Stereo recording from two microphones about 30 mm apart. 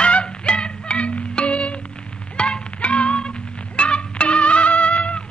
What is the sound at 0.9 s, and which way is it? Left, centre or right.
Music, left.